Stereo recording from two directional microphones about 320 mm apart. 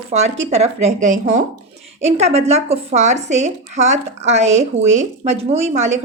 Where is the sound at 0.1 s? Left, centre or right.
Right.